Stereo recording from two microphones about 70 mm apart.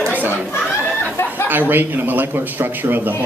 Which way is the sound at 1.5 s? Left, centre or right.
Right.